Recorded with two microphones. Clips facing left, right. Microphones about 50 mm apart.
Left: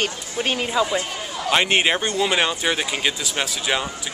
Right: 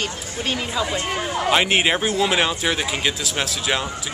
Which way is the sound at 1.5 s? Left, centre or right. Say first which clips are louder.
Even; centre.